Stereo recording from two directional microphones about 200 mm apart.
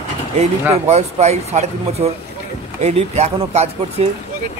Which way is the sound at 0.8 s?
35° right (ahead or behind).